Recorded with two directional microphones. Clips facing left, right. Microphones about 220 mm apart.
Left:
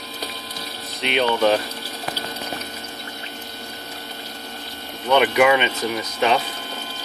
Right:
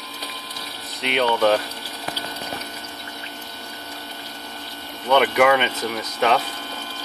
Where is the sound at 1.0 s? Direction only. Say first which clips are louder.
Even; centre (ahead or behind).